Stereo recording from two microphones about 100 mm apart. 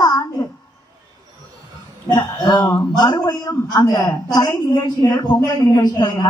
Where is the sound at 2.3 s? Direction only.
45° left (ahead or behind).